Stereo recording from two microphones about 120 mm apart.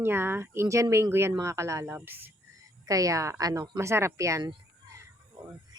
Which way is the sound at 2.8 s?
30° right (ahead or behind).